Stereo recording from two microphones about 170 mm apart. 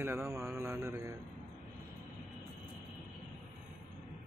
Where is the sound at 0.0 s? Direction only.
15° right (ahead or behind).